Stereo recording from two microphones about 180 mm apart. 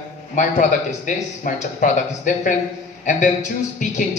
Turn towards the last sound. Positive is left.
turn(degrees=45)  # may be behind; listen again after turning